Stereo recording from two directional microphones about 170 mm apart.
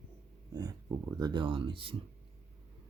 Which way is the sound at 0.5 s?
20° right (ahead or behind).